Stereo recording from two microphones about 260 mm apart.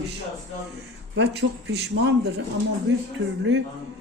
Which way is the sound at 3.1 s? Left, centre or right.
Right.